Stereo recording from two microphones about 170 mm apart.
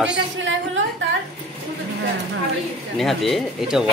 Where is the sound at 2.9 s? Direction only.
Centre (ahead or behind).